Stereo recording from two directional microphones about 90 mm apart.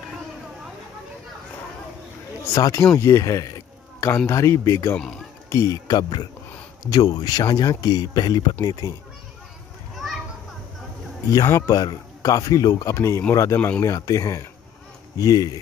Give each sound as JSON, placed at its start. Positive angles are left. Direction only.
{"t": 2.5, "sound": "a man's voice", "side_deg": 35}
{"t": 9.9, "sound": "children playing", "side_deg": 0}
{"t": 11.4, "sound": "a man's voice", "side_deg": 35}
{"t": 13.6, "sound": "speech", "side_deg": 20}
{"t": 13.8, "sound": "a man's voice", "side_deg": 40}